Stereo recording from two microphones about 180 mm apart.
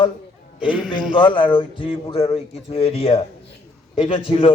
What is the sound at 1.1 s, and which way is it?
A man's voice, 25° left (ahead or behind).